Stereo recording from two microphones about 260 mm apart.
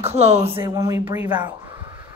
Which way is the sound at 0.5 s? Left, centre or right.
Centre.